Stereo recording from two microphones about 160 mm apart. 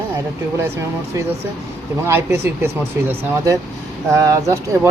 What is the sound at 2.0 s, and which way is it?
Speech, 15° right (ahead or behind).